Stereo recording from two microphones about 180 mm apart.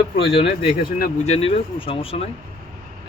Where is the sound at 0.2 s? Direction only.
30° left (ahead or behind).